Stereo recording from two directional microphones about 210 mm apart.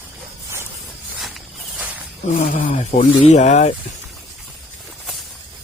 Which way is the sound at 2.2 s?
35° left (ahead or behind).